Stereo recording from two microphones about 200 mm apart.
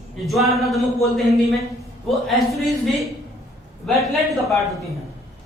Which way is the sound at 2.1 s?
Centre (ahead or behind).